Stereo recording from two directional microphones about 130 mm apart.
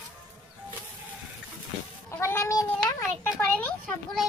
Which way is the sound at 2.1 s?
20° left (ahead or behind).